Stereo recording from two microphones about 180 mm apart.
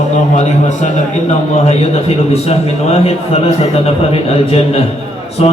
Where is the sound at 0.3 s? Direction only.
40° left (ahead or behind).